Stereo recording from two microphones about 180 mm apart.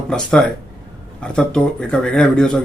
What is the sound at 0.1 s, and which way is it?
A man's voice, 5° left (ahead or behind).